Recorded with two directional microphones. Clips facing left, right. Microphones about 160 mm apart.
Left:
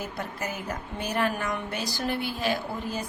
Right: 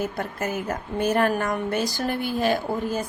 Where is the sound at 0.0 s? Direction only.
50° right (ahead or behind).